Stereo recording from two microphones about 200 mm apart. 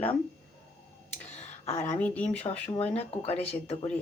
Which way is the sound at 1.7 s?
10° left (ahead or behind).